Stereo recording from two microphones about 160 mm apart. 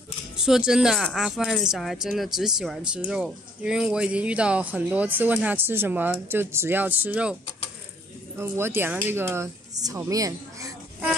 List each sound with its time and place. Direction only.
0.4 s speech: 5° right (ahead or behind)
8.4 s speech: 15° right (ahead or behind)